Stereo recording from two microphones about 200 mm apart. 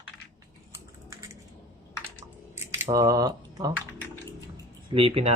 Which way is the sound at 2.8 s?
20° right (ahead or behind).